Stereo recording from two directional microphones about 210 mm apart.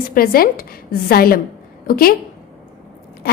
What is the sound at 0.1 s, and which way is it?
A woman's voice, 45° left (ahead or behind).